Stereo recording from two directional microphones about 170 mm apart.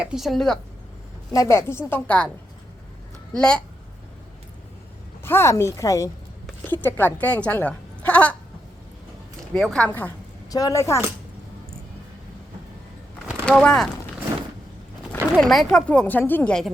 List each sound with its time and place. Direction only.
0.0 s speech: 5° right (ahead or behind)
1.3 s a woman's voice: 20° left (ahead or behind)
3.3 s speech: 5° left (ahead or behind)
5.2 s a woman's voice: 15° left (ahead or behind)
9.6 s a woman's voice: 5° left (ahead or behind)
10.5 s speech: 20° left (ahead or behind)
13.4 s speech: 5° left (ahead or behind)
15.1 s speech: 5° left (ahead or behind)